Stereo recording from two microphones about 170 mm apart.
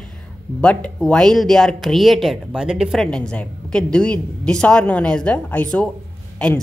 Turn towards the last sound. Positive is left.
turn(degrees=5)  # may be behind; listen again after turning